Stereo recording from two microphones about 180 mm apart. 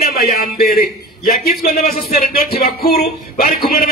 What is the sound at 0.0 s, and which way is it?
A man's voice, 60° left (ahead or behind).